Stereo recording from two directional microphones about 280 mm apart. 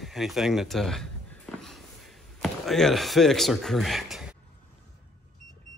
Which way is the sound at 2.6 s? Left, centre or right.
Centre.